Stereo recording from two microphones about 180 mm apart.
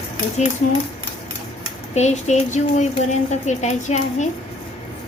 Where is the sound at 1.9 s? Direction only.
40° left (ahead or behind).